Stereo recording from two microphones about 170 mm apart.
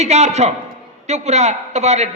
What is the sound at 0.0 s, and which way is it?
A man's voice, 40° right (ahead or behind).